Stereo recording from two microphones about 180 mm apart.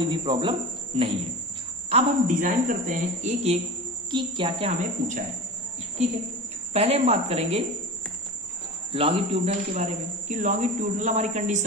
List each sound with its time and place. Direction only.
0.0 s speech: 25° right (ahead or behind)
1.9 s a man's voice: 40° right (ahead or behind)
4.1 s a man's voice: 25° right (ahead or behind)
6.7 s a man's voice: 35° right (ahead or behind)
8.9 s a man's voice: 35° right (ahead or behind)